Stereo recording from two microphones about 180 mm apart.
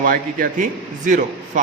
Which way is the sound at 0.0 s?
50° right (ahead or behind).